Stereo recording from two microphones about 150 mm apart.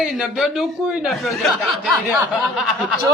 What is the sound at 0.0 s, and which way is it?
Speech, centre (ahead or behind).